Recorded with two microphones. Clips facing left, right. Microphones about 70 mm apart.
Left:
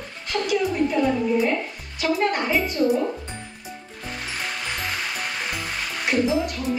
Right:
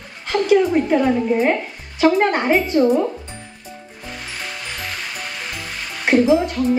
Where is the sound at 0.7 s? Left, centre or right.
Right.